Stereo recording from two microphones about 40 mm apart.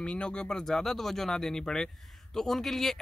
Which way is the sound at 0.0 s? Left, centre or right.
Left.